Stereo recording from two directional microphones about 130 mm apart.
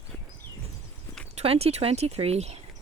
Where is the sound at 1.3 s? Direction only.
50° right (ahead or behind).